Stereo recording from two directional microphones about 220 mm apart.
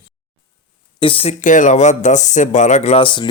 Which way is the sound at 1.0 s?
25° left (ahead or behind).